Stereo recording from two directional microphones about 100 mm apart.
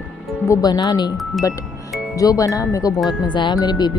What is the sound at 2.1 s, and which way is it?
Speech, 35° left (ahead or behind).